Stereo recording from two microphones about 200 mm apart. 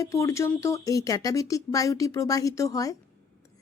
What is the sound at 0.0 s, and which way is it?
A woman's voice, 15° left (ahead or behind).